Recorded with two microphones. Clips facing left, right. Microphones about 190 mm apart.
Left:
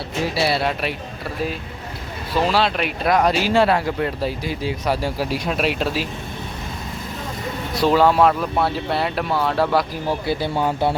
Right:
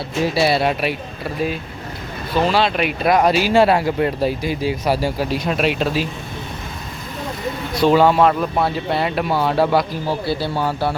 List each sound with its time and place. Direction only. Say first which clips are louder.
0.4 s speech: right 3 dB; 15° right (ahead or behind)
2.3 s speech: right 2 dB; centre (ahead or behind)
7.8 s speech: right 2 dB; centre (ahead or behind)
10.2 s speech: left 2 dB; 20° left (ahead or behind)